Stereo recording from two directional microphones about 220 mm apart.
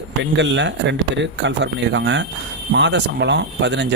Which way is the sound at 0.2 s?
55° right (ahead or behind).